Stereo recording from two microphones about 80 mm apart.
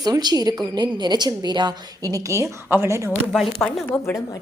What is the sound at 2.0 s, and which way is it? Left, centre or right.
A woman's voice, right.